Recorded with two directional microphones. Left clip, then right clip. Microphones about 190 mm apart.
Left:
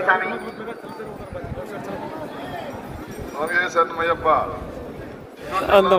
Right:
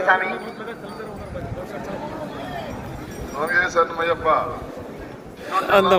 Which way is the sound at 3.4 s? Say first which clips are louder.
Right 1 dB; 50° left (ahead or behind).